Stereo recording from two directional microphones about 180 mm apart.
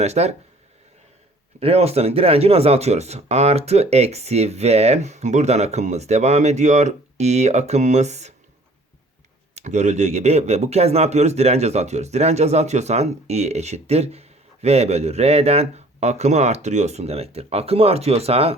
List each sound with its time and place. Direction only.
0.0 s speech: 35° right (ahead or behind)
1.5 s speech: 35° right (ahead or behind)
9.6 s speech: 40° right (ahead or behind)